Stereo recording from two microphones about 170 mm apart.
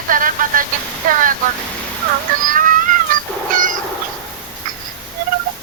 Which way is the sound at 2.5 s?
50° right (ahead or behind).